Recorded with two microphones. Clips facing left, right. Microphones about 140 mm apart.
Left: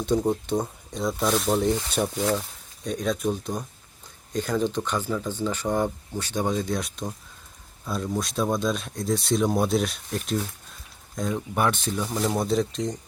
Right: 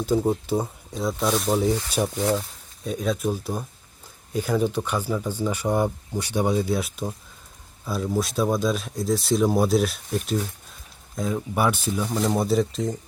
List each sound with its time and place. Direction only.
0.0 s speech: 5° right (ahead or behind)
1.9 s speech: 15° right (ahead or behind)